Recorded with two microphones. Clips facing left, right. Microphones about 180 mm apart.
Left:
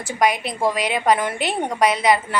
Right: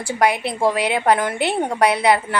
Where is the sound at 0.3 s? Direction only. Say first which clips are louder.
Right 2 dB; 15° left (ahead or behind).